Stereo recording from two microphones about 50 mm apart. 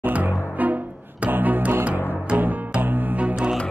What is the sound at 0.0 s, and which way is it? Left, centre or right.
Music, right.